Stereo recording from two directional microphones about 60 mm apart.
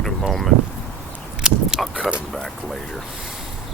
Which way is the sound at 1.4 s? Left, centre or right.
Centre.